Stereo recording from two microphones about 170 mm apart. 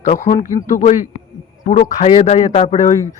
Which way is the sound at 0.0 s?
45° left (ahead or behind).